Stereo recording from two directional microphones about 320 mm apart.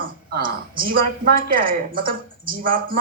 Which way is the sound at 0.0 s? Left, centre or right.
Right.